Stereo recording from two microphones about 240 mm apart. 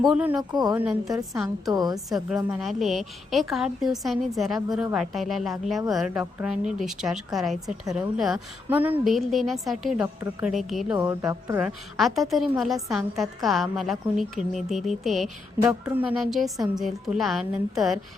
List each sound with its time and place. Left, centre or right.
0.0 s a woman's voice: centre
0.5 s speech: centre
2.1 s a woman's voice: centre
10.9 s speech: centre
11.9 s a woman's voice: centre